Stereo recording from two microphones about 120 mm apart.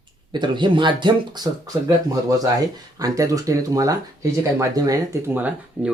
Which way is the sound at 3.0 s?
30° right (ahead or behind).